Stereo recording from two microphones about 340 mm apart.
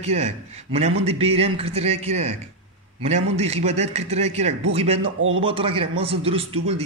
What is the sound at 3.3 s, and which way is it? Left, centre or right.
A man's voice, centre.